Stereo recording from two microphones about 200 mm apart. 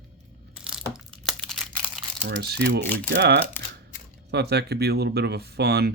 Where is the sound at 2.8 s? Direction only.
10° left (ahead or behind).